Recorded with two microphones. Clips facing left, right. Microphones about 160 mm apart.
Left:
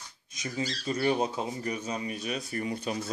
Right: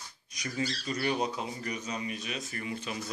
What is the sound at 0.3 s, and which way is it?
Speech, 25° left (ahead or behind).